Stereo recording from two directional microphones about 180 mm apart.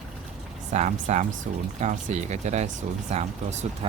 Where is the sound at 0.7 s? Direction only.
40° right (ahead or behind).